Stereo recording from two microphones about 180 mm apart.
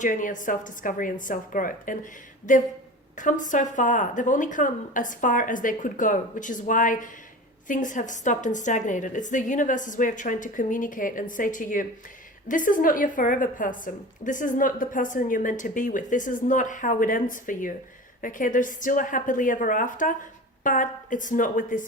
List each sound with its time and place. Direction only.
0.0 s a woman's voice: 45° left (ahead or behind)